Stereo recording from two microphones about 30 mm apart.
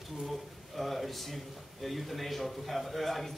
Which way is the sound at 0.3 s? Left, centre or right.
Centre.